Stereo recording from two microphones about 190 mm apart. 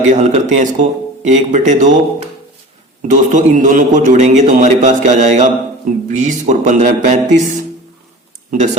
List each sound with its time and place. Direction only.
0.0 s a man's voice: 40° right (ahead or behind)
3.1 s a man's voice: 40° right (ahead or behind)
8.4 s a man's voice: 40° right (ahead or behind)